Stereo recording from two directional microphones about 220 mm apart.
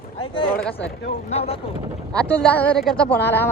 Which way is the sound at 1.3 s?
25° left (ahead or behind).